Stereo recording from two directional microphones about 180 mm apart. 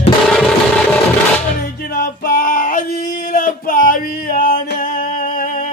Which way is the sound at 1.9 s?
55° left (ahead or behind).